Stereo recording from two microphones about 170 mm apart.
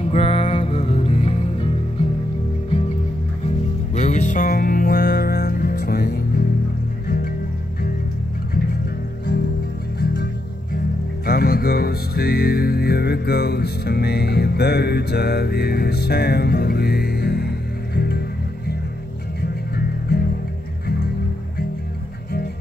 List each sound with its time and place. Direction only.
0.0 s music: 35° left (ahead or behind)
3.9 s music: 45° left (ahead or behind); by 6.4 s 70° left (ahead or behind)
11.2 s music: 60° left (ahead or behind)